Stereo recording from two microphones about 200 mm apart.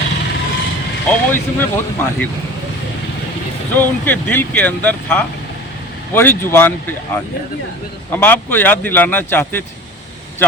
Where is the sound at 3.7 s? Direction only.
10° left (ahead or behind).